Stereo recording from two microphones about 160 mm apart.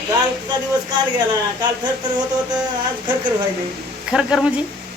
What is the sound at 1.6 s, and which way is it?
Speech, 25° right (ahead or behind).